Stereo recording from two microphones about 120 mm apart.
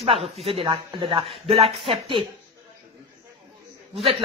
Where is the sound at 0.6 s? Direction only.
45° right (ahead or behind).